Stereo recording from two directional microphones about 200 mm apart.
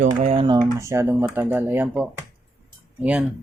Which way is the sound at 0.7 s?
15° right (ahead or behind).